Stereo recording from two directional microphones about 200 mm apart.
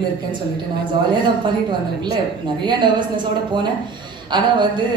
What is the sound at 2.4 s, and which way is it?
Speech, 25° right (ahead or behind).